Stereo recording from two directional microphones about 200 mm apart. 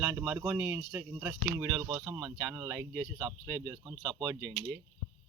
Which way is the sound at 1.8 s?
25° right (ahead or behind).